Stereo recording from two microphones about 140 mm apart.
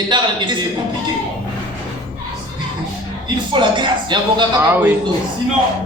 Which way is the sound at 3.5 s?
35° right (ahead or behind).